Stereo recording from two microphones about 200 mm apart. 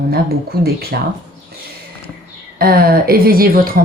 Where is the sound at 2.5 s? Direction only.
50° right (ahead or behind).